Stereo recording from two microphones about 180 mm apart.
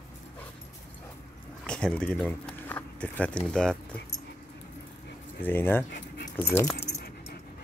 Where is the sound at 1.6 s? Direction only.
5° left (ahead or behind).